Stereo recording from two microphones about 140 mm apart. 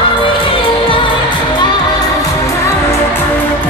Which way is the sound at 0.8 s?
40° left (ahead or behind).